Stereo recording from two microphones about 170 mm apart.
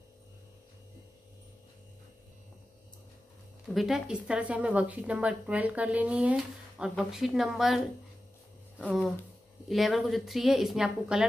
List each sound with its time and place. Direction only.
3.6 s speech: centre (ahead or behind)
9.7 s speech: centre (ahead or behind)